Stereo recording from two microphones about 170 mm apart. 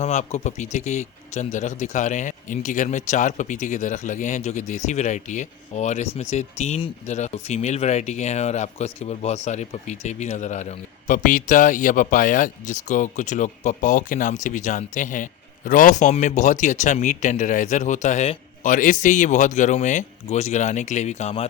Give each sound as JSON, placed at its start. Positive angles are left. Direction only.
{"t": 0.0, "sound": "speech", "side_deg": 40}